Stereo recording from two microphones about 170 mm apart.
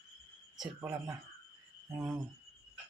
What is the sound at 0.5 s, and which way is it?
Speech, 10° right (ahead or behind).